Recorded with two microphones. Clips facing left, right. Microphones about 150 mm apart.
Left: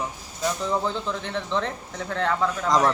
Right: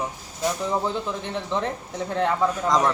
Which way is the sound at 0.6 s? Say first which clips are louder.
Even; 15° right (ahead or behind).